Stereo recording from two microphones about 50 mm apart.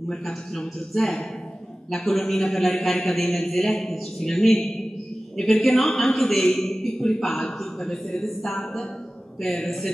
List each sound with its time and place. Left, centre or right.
0.1 s a man's voice: centre